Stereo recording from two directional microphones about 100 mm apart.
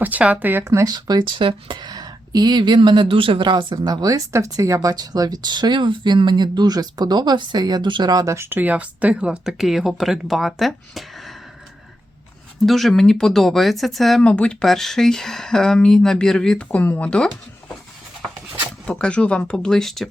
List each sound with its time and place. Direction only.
0.0 s speech: 15° right (ahead or behind)
0.6 s speech: 30° right (ahead or behind)
0.9 s speech: 40° right (ahead or behind)
1.3 s speech: 60° right (ahead or behind)
8.1 s speech: 35° right (ahead or behind); by 11.0 s centre (ahead or behind)
12.6 s speech: centre (ahead or behind)
14.2 s speech: 10° left (ahead or behind)
18.9 s speech: 10° left (ahead or behind)